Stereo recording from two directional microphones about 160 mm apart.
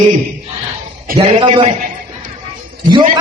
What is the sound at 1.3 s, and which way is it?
Speech, 30° right (ahead or behind).